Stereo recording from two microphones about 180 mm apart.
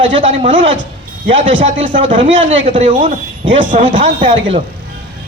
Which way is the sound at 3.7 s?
45° right (ahead or behind).